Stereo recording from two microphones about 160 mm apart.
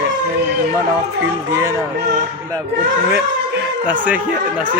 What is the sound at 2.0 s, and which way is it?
Speech, 55° right (ahead or behind).